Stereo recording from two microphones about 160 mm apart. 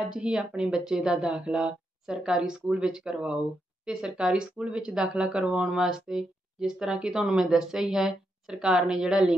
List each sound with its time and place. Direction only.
0.1 s speech: 5° right (ahead or behind)